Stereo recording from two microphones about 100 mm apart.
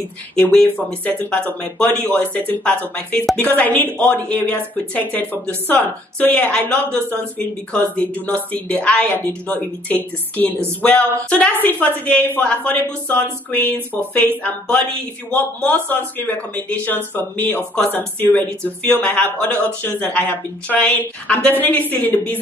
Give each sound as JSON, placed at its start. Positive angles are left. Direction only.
{"t": 0.4, "sound": "speech", "side_deg": 5}